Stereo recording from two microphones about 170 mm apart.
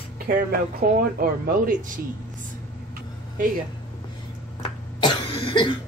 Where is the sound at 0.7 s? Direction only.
60° right (ahead or behind).